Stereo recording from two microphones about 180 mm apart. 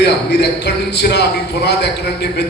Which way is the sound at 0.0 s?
65° left (ahead or behind).